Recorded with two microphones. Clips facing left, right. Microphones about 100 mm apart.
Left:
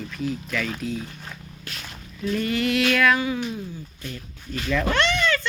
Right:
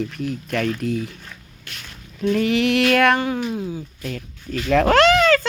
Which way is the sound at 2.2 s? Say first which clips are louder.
Right 6 dB; 70° right (ahead or behind).